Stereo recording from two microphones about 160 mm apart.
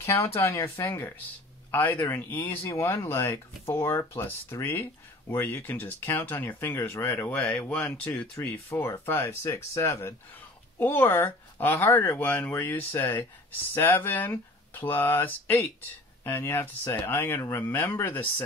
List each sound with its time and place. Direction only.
0.0 s speech: 20° left (ahead or behind)